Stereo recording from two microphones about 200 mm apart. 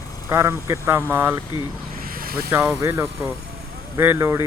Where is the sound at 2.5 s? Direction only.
10° right (ahead or behind).